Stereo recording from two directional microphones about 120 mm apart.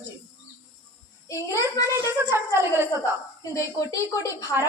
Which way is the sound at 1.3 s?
25° left (ahead or behind).